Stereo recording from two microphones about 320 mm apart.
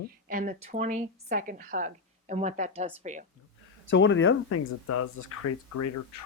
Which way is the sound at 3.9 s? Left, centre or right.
Left.